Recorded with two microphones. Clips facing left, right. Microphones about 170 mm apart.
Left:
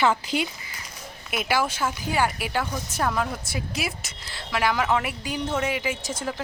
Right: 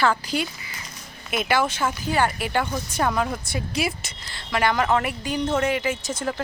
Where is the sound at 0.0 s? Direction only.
20° left (ahead or behind).